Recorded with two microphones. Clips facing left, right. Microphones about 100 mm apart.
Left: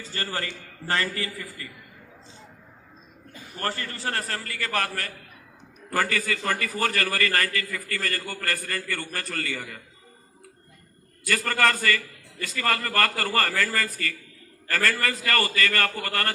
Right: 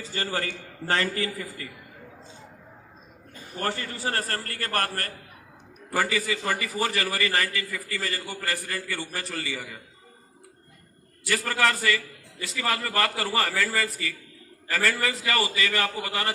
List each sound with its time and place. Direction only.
0.0 s a man's voice: 15° right (ahead or behind)
3.6 s a man's voice: 15° right (ahead or behind)
4.4 s a man's voice: 45° right (ahead or behind)
5.9 s a man's voice: 5° right (ahead or behind)
11.3 s a man's voice: 5° right (ahead or behind)